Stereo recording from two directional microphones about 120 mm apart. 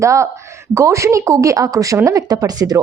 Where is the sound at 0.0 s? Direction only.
25° right (ahead or behind).